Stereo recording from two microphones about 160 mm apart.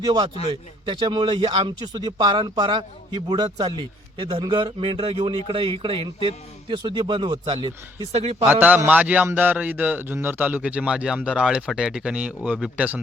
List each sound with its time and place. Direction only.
0.0 s speech: 25° right (ahead or behind)
8.1 s a man's voice: 40° right (ahead or behind)
8.4 s a man's voice: 10° right (ahead or behind)